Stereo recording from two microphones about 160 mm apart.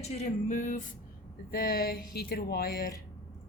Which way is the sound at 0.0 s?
45° left (ahead or behind).